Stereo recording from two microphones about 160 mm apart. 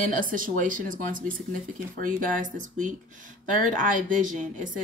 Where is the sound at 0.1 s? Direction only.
60° right (ahead or behind).